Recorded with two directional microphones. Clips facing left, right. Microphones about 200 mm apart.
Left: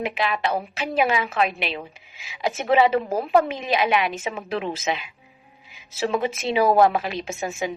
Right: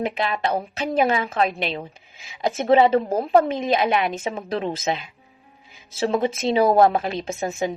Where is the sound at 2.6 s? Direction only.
40° right (ahead or behind).